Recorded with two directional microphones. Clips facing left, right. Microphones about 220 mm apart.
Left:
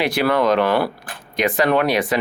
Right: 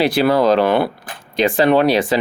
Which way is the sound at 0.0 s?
30° right (ahead or behind).